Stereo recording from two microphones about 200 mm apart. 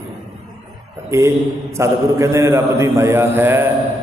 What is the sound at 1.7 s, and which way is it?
A man's voice, 15° right (ahead or behind).